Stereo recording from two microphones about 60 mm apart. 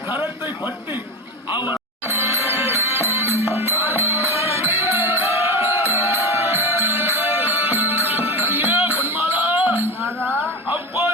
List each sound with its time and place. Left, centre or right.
0.1 s a sound: right
2.0 s music: right
10.2 s music: left